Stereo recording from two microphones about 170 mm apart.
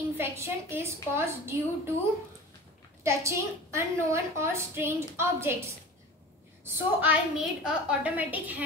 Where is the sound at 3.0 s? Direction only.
15° right (ahead or behind).